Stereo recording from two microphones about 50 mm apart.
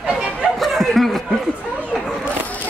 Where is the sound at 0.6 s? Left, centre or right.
Centre.